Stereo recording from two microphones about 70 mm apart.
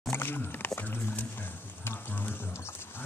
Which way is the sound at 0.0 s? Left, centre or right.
Left.